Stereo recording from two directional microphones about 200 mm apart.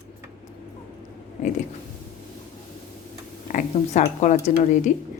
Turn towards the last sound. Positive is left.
turn(degrees=40)  # may be behind; listen again after turning